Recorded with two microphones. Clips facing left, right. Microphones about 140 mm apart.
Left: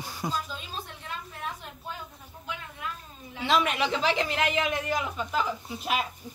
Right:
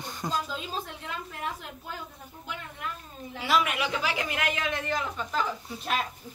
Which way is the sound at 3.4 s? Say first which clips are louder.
Left 1 dB; 25° left (ahead or behind).